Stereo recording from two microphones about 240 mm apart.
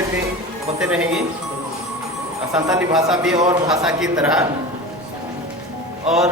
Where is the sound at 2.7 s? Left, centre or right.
Centre.